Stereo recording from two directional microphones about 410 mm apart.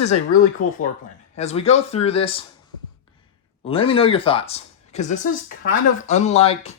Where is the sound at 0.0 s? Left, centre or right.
Centre.